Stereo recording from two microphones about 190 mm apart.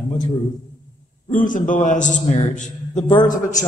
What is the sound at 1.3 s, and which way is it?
A man's voice, 45° left (ahead or behind).